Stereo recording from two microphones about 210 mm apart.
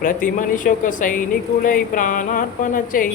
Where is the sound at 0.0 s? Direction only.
40° left (ahead or behind).